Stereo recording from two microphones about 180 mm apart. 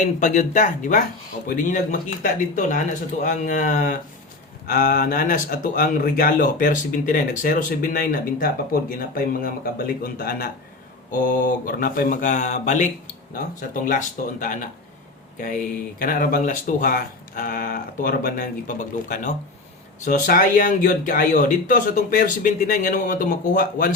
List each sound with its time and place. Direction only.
0.0 s speech: 45° left (ahead or behind)